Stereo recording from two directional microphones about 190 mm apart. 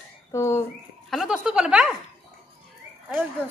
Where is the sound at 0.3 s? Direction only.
15° left (ahead or behind).